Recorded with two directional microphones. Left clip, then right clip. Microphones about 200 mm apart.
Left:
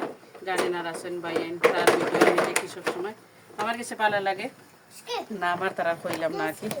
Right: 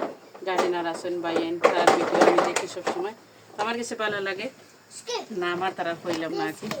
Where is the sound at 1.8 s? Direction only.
55° left (ahead or behind).